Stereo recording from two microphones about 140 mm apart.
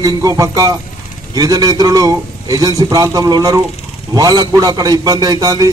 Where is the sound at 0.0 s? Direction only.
25° right (ahead or behind).